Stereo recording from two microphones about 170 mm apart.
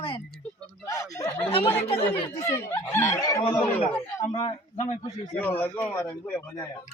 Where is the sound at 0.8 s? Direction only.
20° left (ahead or behind).